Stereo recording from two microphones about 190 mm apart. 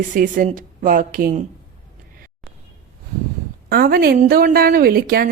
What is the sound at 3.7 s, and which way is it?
A woman's voice, 55° right (ahead or behind).